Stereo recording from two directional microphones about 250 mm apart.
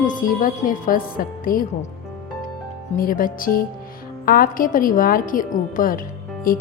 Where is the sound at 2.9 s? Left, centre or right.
Left.